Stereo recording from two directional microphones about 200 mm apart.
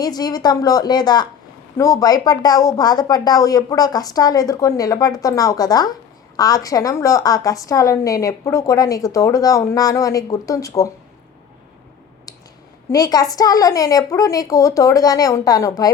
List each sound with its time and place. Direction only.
0.0 s a woman's voice: 20° left (ahead or behind)
12.9 s a woman's voice: 20° left (ahead or behind)